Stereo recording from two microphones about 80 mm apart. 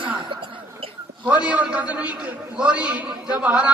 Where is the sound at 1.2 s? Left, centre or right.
Centre.